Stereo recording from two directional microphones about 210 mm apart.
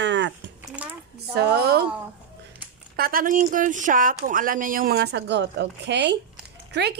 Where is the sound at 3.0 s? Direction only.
45° right (ahead or behind).